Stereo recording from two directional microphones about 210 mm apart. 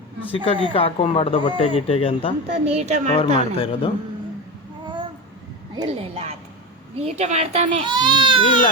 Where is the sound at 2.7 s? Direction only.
30° right (ahead or behind).